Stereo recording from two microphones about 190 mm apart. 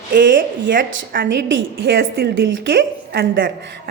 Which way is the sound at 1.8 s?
75° right (ahead or behind).